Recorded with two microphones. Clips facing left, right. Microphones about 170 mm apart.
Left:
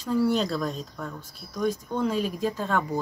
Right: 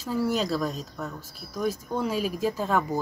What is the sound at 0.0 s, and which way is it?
Speech, 5° right (ahead or behind).